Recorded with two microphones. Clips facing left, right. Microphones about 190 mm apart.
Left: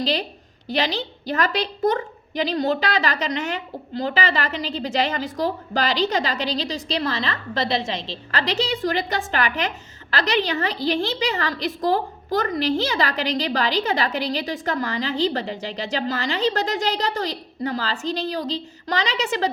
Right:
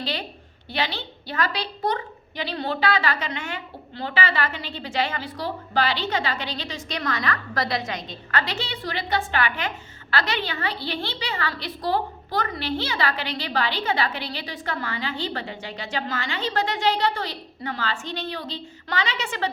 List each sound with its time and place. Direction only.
0.0 s a woman's voice: 40° left (ahead or behind)
2.5 s a woman's voice: 40° left (ahead or behind)